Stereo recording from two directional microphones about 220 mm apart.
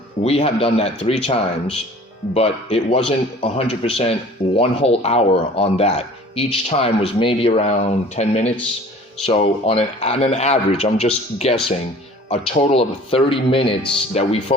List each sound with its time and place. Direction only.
0.2 s a man's voice: 25° left (ahead or behind)